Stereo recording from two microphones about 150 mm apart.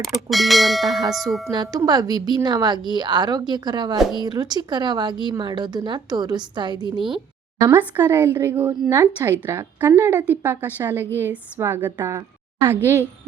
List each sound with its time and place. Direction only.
0.0 s speech: centre (ahead or behind)
1.5 s a woman's voice: 25° right (ahead or behind)
7.6 s a woman's voice: 15° right (ahead or behind)